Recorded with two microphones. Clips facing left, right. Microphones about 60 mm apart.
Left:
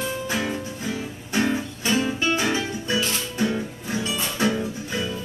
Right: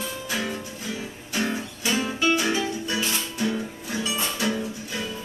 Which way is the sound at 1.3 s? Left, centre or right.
Left.